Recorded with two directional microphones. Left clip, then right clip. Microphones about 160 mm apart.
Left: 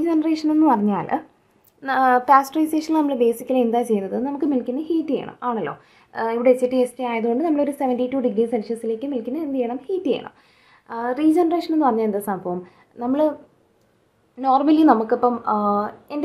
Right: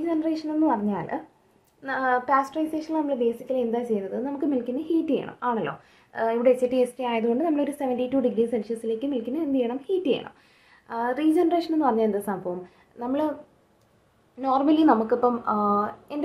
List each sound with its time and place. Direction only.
0.0 s a woman's voice: 35° left (ahead or behind)
14.4 s a woman's voice: 25° left (ahead or behind)